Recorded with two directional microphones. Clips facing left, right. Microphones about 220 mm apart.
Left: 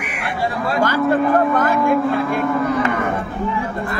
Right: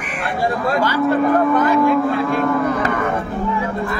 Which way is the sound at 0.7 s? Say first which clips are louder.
Left 2 dB; 50° left (ahead or behind).